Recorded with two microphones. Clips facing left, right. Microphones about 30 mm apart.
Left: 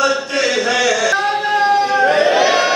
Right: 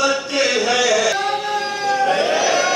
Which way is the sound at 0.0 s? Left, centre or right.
Left.